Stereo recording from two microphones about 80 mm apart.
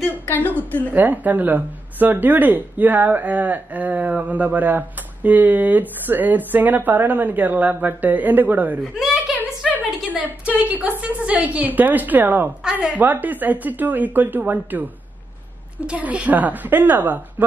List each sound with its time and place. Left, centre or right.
0.1 s a sound: left
0.9 s speech: right
8.9 s speech: centre
9.4 s a sound: centre
10.0 s a woman's voice: centre
15.9 s speech: centre